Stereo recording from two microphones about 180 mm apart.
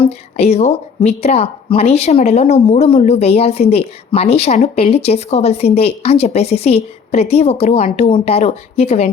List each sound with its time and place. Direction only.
0.0 s a woman's voice: 35° left (ahead or behind)